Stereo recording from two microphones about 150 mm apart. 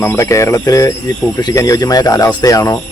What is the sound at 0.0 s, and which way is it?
Speech, 20° left (ahead or behind).